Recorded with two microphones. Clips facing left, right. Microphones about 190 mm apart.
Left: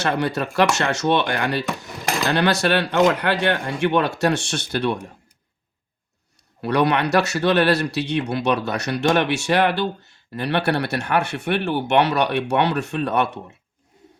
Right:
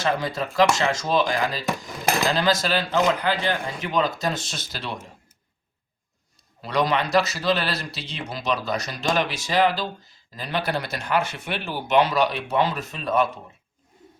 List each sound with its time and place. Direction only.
0.0 s speech: 70° left (ahead or behind)
6.6 s speech: 65° left (ahead or behind)